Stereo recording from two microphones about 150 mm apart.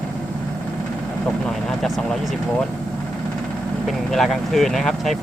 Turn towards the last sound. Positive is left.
turn(degrees=0)  # may be behind; listen again after turning